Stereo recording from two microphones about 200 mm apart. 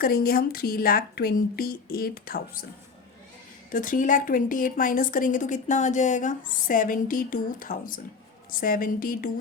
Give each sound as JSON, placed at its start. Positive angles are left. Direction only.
{"t": 0.0, "sound": "a woman's voice", "side_deg": 50}
{"t": 3.7, "sound": "a woman's voice", "side_deg": 40}